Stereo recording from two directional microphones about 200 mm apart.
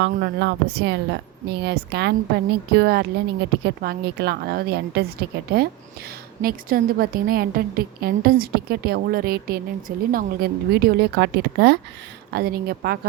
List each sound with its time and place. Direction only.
0.0 s a woman's voice: 60° right (ahead or behind)